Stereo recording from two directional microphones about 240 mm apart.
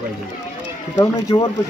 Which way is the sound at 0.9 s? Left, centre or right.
Centre.